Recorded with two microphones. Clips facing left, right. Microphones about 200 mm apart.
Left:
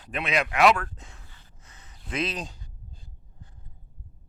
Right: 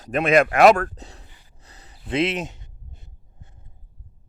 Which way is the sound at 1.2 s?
15° right (ahead or behind).